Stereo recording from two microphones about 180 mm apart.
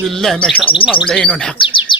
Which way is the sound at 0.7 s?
30° left (ahead or behind).